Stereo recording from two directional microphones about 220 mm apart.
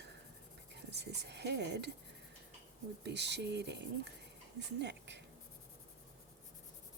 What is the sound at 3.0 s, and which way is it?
A woman's voice, 50° right (ahead or behind).